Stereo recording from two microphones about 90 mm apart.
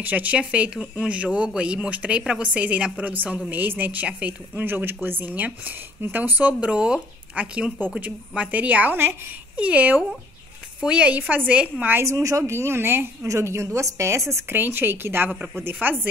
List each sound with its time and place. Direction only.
0.0 s a woman's voice: 20° right (ahead or behind)
12.0 s a woman's voice: 35° right (ahead or behind)